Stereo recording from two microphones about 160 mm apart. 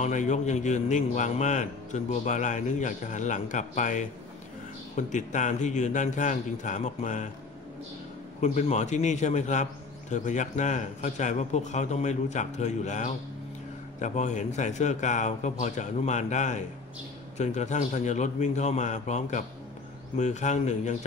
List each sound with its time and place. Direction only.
0.0 s a man's voice: 50° left (ahead or behind)
8.4 s a man's voice: 45° left (ahead or behind)